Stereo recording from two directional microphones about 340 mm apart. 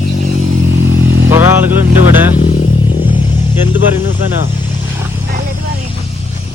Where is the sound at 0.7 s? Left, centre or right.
Right.